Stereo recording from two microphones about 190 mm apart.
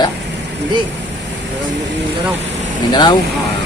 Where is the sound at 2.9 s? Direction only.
20° left (ahead or behind).